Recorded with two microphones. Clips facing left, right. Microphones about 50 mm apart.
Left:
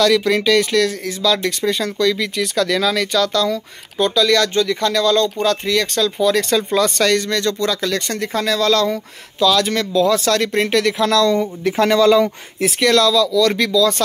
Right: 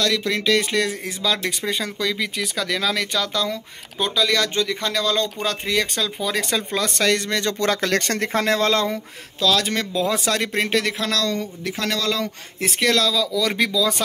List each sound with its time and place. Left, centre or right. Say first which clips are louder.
0.2 s speech: left 6 dB; centre
0.5 s speech: left 3 dB; centre
0.7 s speech: left 5 dB; centre
7.2 s speech: left 4 dB; right
7.5 s speech: left 1 dB; right
9.4 s speech: left 5 dB; centre
9.9 s speech: left 7 dB; centre
11.0 s speech: left 8 dB; centre
11.7 s speech: left 12 dB; left
12.5 s speech: left 5 dB; centre